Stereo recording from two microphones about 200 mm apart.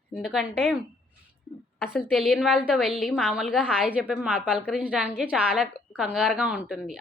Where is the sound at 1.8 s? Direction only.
5° right (ahead or behind).